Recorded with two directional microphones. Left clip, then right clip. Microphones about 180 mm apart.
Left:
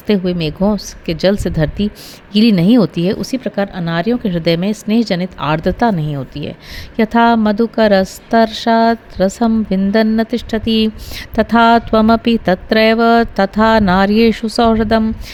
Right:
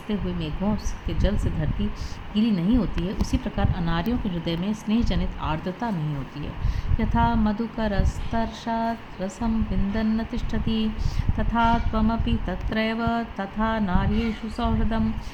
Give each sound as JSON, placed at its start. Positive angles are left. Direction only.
{"t": 0.1, "sound": "a woman's voice", "side_deg": 60}
{"t": 3.3, "sound": "speech", "side_deg": 40}
{"t": 6.9, "sound": "a woman's voice", "side_deg": 60}